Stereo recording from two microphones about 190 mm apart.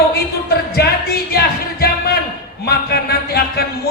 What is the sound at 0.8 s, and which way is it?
Speech, 60° left (ahead or behind).